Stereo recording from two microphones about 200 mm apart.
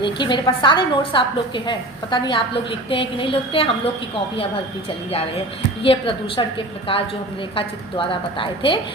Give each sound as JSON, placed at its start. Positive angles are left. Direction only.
{"t": 0.0, "sound": "a woman's voice", "side_deg": 20}
{"t": 5.8, "sound": "a woman's voice", "side_deg": 25}